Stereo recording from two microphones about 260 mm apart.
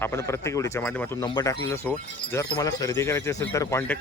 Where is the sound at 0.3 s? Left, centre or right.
Centre.